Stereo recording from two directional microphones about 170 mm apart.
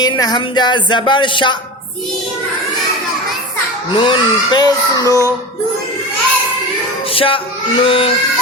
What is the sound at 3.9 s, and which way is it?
Music, 30° left (ahead or behind).